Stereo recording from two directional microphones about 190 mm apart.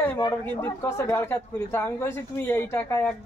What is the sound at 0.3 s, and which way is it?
Speech, 15° left (ahead or behind).